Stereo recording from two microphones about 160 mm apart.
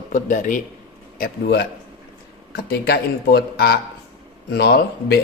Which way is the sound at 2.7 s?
90° left.